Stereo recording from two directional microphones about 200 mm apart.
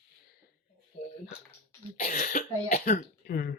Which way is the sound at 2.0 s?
45° left (ahead or behind).